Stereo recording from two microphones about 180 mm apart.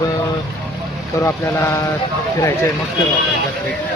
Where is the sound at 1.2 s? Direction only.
15° left (ahead or behind).